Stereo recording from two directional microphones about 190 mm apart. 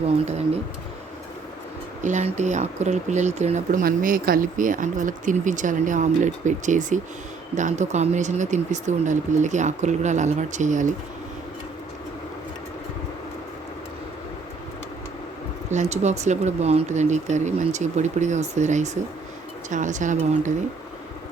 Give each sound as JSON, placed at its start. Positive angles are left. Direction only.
{"t": 0.3, "sound": "speech", "side_deg": -35}
{"t": 2.0, "sound": "speech", "side_deg": -40}
{"t": 15.7, "sound": "speech", "side_deg": -35}